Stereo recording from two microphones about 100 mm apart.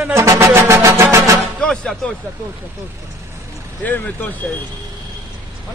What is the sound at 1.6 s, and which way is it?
Speech, 5° left (ahead or behind).